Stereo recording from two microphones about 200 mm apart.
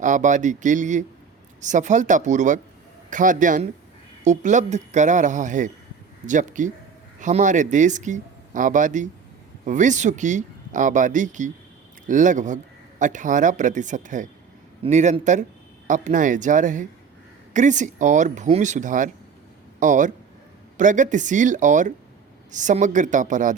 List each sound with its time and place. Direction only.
0.0 s speech: 40° right (ahead or behind)